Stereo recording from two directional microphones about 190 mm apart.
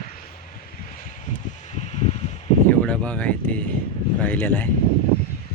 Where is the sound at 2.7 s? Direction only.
5° left (ahead or behind).